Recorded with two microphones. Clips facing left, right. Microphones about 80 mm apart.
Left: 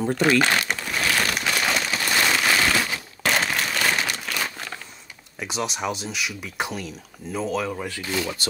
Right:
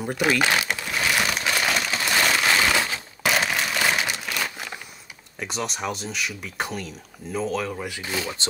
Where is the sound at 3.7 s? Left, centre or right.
Centre.